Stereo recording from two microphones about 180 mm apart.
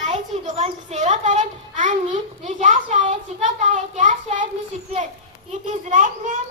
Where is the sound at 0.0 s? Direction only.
40° right (ahead or behind).